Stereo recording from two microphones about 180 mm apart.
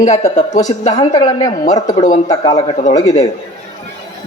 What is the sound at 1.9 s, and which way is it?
Speech, 40° left (ahead or behind).